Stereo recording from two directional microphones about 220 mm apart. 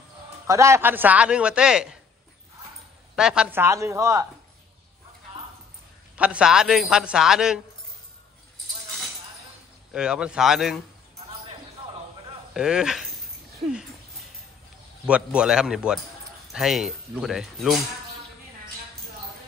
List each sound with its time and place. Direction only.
0.5 s a man's voice: 15° right (ahead or behind)
3.2 s speech: 5° right (ahead or behind)
6.1 s a man's voice: 5° right (ahead or behind)
9.9 s a man's voice: 5° right (ahead or behind)
12.5 s speech: 5° right (ahead or behind)
15.0 s a man's voice: 5° right (ahead or behind)